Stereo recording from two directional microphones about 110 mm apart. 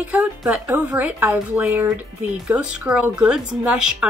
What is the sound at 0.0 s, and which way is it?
A woman's voice, 15° right (ahead or behind).